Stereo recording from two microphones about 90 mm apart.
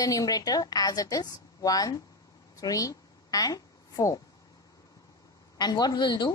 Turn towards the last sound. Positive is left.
turn(degrees=55)  # may be behind; listen again after turning